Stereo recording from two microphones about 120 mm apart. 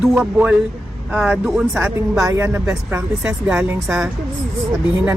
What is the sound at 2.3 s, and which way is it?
Speech, 20° right (ahead or behind).